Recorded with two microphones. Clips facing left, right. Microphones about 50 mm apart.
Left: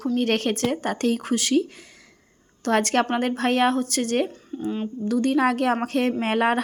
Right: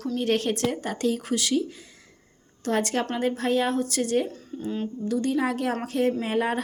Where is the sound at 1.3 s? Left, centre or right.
Left.